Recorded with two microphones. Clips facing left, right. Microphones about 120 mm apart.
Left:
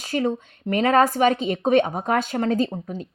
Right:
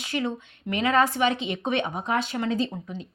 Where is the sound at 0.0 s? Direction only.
40° left (ahead or behind).